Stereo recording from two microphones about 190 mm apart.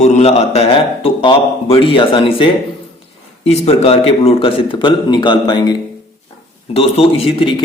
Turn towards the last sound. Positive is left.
turn(degrees=30)  # may be behind; listen again after turning